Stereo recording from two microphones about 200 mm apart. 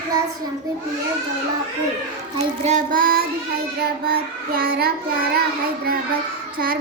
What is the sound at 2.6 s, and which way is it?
A child's voice, 40° right (ahead or behind).